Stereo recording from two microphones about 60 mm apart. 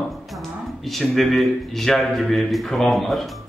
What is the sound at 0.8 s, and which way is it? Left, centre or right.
A man's voice, centre.